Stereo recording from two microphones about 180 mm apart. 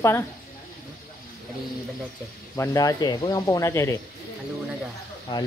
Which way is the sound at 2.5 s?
15° left (ahead or behind).